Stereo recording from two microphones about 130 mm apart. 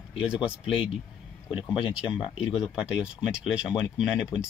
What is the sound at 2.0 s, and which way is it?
Speech, 40° left (ahead or behind).